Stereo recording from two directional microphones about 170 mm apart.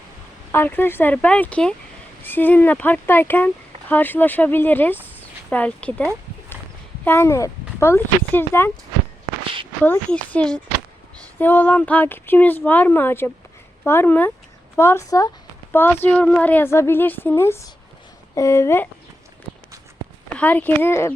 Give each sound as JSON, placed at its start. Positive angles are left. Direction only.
{"t": 0.5, "sound": "speech", "side_deg": 10}
{"t": 9.8, "sound": "speech", "side_deg": 10}
{"t": 20.3, "sound": "speech", "side_deg": 10}